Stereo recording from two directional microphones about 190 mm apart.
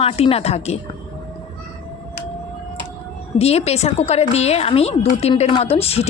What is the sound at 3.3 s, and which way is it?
A woman's voice, 35° left (ahead or behind).